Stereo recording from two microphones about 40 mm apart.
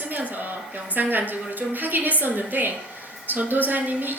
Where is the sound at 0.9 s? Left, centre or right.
Right.